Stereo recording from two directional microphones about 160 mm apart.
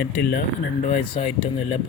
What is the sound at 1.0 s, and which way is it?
Speech, 35° left (ahead or behind).